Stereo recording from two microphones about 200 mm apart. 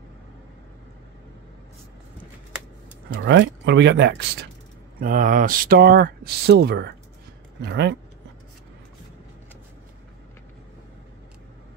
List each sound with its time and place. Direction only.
3.1 s speech: 60° right (ahead or behind)
5.0 s speech: 45° right (ahead or behind)